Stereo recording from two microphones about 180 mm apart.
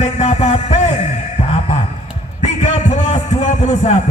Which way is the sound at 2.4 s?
40° left (ahead or behind).